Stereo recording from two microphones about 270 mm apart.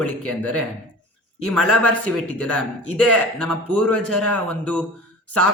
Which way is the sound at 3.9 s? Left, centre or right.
Right.